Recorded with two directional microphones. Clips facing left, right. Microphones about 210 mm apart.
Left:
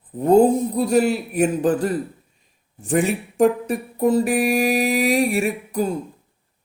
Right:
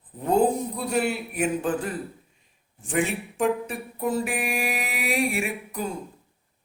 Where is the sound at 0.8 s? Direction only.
40° left (ahead or behind).